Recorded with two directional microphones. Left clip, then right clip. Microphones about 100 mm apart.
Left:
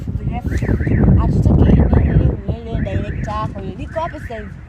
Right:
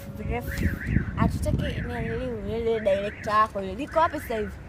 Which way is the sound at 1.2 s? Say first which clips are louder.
Left 9 dB; 45° right (ahead or behind).